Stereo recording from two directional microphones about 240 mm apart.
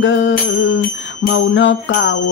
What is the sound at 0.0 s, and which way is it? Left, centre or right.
Jingle bell, left.